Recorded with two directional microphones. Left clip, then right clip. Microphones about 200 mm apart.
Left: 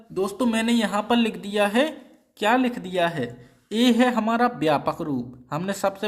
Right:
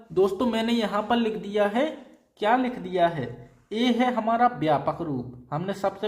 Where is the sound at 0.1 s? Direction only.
15° left (ahead or behind).